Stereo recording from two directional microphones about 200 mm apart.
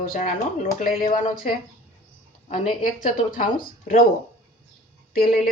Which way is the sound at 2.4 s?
40° left (ahead or behind).